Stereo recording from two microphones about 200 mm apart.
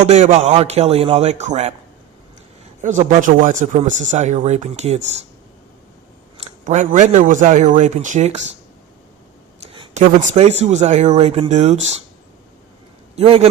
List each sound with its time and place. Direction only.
0.0 s speech: 35° right (ahead or behind)
2.8 s speech: 35° right (ahead or behind)
6.7 s speech: 35° right (ahead or behind)
9.6 s a sound: 25° right (ahead or behind)
10.0 s speech: 40° right (ahead or behind)
13.1 s a man's voice: 30° right (ahead or behind)